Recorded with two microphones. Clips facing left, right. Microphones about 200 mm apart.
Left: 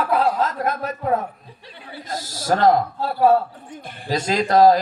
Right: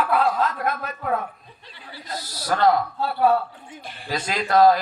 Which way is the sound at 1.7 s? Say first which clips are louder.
Left 4 dB; 55° left (ahead or behind).